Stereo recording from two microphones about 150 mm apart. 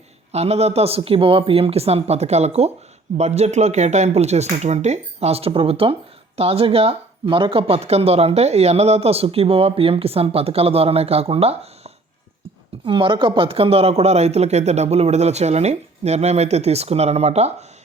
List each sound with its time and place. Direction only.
0.3 s speech: 45° right (ahead or behind)